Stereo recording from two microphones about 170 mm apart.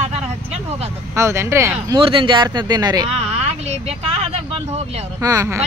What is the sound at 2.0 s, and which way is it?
Speech, 30° right (ahead or behind).